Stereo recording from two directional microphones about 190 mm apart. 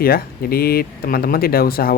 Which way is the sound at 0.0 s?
50° left (ahead or behind).